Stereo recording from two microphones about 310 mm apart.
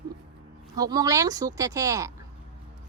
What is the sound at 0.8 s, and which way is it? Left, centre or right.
Speech, centre.